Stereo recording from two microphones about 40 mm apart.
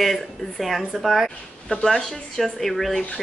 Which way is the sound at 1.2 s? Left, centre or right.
Centre.